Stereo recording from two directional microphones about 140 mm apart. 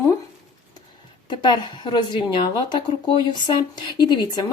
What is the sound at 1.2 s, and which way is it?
A woman's voice, 30° left (ahead or behind).